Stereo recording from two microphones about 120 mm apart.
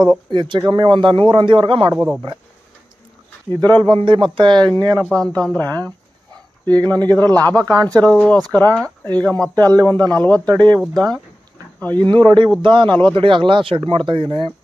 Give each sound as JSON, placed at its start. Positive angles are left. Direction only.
{"t": 0.0, "sound": "a man's voice", "side_deg": -40}
{"t": 2.0, "sound": "speech", "side_deg": 0}
{"t": 3.6, "sound": "a man's voice", "side_deg": -35}
{"t": 4.9, "sound": "speech", "side_deg": 5}
{"t": 6.7, "sound": "a man's voice", "side_deg": -35}
{"t": 7.9, "sound": "speech", "side_deg": 10}
{"t": 9.6, "sound": "a man's voice", "side_deg": -30}
{"t": 9.8, "sound": "speech", "side_deg": 15}
{"t": 11.8, "sound": "speech", "side_deg": 15}
{"t": 12.2, "sound": "a man's voice", "side_deg": -40}